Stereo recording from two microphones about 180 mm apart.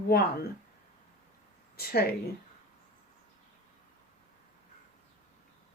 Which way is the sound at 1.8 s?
60° left (ahead or behind).